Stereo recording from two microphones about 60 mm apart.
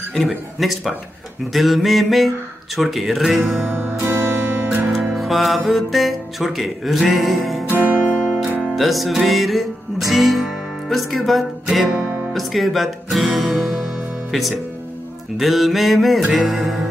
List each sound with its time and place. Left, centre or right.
0.1 s speech: centre
3.7 s music: right
4.9 s music: centre
7.9 s music: right
8.2 s music: centre
8.7 s speech: centre
11.6 s music: centre
12.4 s speech: centre
15.3 s speech: centre